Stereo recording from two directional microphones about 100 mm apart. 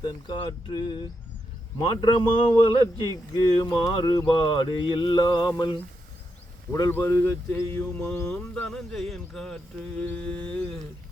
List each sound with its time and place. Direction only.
0.0 s mantra: 45° left (ahead or behind)
3.1 s speech: 35° left (ahead or behind)
3.7 s mantra: 45° left (ahead or behind)
6.9 s a sound: 25° left (ahead or behind)
8.0 s speech: 10° left (ahead or behind)